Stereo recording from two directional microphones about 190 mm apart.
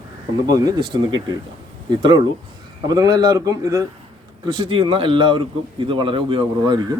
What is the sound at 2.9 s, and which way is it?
Speech, 20° right (ahead or behind).